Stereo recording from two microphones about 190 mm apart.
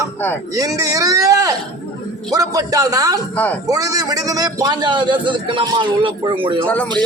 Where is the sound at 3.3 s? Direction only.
10° left (ahead or behind).